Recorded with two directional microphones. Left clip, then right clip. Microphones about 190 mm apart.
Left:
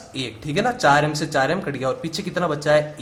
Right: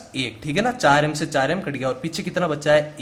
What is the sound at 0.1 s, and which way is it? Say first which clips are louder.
Speech: right 1 dB; 15° right (ahead or behind).